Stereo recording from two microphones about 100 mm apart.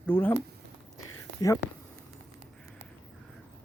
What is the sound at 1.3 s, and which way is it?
Speech, 30° left (ahead or behind).